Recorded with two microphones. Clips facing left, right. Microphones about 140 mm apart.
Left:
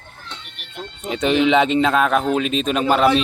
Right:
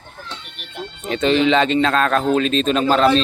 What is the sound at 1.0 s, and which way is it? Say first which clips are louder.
A man's voice: right 1 dB; 15° left (ahead or behind).